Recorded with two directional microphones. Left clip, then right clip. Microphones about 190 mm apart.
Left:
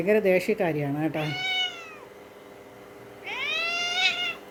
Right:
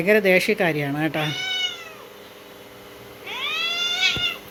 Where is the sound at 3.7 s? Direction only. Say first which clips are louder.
Right 4 dB; 20° left (ahead or behind).